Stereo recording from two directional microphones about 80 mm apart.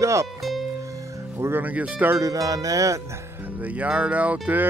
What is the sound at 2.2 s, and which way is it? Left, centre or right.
Music, right.